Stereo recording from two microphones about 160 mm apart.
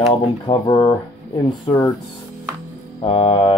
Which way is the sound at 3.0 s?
35° left (ahead or behind).